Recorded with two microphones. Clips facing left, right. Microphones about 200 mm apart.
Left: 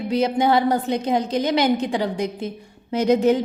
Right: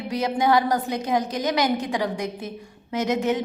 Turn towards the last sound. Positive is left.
turn(degrees=35)  # may be behind; listen again after turning